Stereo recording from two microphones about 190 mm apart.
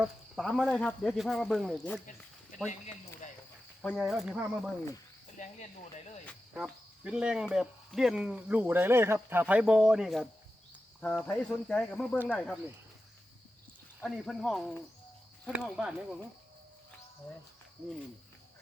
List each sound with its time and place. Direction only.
0.0 s speech: centre (ahead or behind)
3.8 s speech: 5° left (ahead or behind)
5.4 s speech: 40° left (ahead or behind)
6.5 s speech: 5° right (ahead or behind)
14.0 s speech: centre (ahead or behind)